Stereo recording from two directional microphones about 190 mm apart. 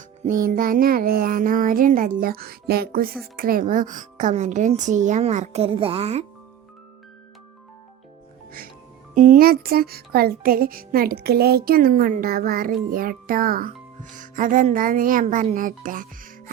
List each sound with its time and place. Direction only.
0.3 s speech: 45° right (ahead or behind)
9.1 s speech: 45° right (ahead or behind)